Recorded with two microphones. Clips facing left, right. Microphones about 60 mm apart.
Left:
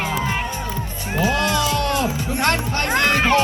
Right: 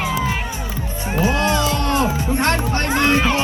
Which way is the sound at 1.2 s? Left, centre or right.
Right.